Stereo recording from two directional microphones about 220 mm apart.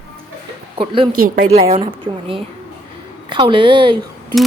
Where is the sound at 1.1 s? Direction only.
40° right (ahead or behind).